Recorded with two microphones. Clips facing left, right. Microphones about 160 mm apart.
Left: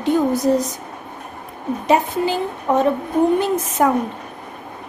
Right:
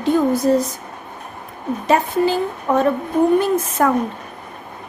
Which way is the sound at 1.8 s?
15° left (ahead or behind).